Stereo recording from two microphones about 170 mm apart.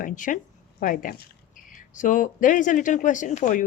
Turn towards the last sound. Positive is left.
turn(degrees=45)  # may be behind; listen again after turning